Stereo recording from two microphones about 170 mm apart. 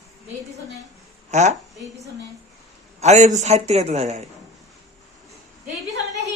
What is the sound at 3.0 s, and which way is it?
A man's voice, 45° right (ahead or behind).